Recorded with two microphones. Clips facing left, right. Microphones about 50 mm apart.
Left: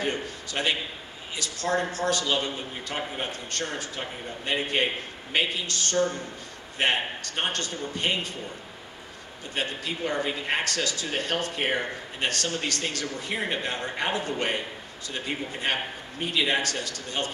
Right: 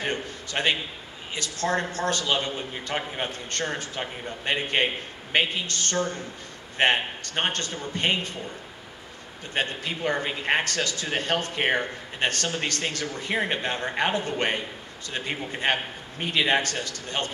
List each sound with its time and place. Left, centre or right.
0.0 s speech: right
9.5 s a man's voice: right